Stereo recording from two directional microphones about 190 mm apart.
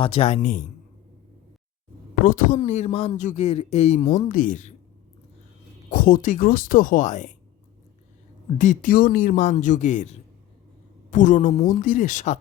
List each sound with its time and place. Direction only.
0.0 s speech: 30° left (ahead or behind)
2.2 s speech: 45° left (ahead or behind)
5.9 s speech: 45° left (ahead or behind)
8.5 s speech: 40° left (ahead or behind)